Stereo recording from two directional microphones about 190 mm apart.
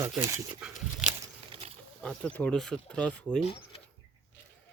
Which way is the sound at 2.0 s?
5° left (ahead or behind).